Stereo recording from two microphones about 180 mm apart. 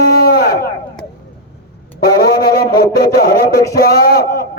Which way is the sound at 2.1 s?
60° left (ahead or behind).